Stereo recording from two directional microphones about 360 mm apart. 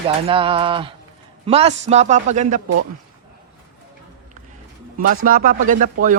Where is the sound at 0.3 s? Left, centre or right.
Centre.